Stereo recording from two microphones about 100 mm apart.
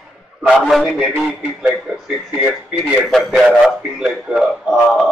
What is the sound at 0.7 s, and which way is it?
Speech, 5° left (ahead or behind).